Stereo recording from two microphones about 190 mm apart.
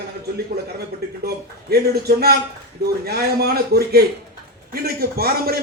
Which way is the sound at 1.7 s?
55° right (ahead or behind).